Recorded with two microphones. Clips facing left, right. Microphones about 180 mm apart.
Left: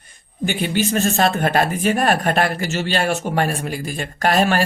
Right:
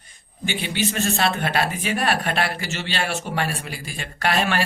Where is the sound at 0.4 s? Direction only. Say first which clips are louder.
Left 5 dB; 45° left (ahead or behind).